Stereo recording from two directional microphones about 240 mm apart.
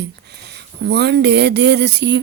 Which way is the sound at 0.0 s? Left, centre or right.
Right.